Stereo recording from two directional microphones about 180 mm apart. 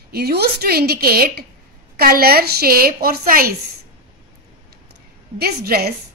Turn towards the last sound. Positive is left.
turn(degrees=-60)  # may be behind; listen again after turning